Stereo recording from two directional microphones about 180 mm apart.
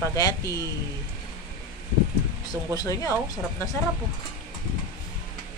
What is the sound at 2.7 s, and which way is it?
Speech, 20° left (ahead or behind).